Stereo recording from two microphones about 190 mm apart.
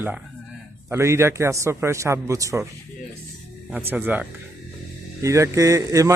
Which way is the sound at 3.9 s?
10° right (ahead or behind).